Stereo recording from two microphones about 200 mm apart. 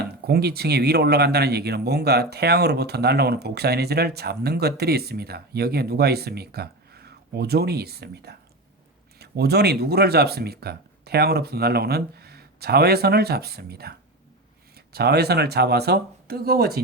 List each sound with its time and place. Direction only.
0.0 s speech: 50° right (ahead or behind)
14.9 s speech: 55° right (ahead or behind)